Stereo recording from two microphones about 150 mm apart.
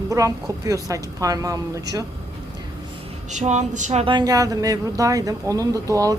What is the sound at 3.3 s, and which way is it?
Speech, 50° right (ahead or behind).